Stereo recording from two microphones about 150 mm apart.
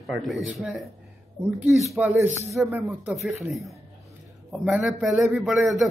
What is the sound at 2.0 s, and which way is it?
A man's voice, 15° right (ahead or behind).